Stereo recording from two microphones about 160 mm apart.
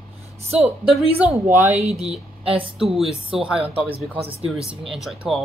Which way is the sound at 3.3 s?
5° right (ahead or behind).